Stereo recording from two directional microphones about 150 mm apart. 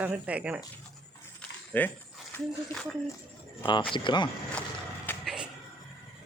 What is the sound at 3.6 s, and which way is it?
Speech, 30° left (ahead or behind).